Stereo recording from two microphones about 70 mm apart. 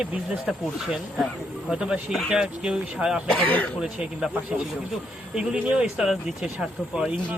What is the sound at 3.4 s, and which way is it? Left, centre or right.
Speech, left.